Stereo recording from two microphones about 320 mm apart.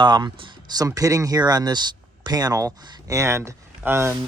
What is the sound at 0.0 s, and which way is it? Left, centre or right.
Speech, centre.